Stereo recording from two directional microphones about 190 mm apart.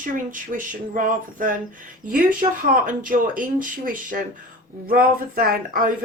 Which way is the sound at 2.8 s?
45° right (ahead or behind).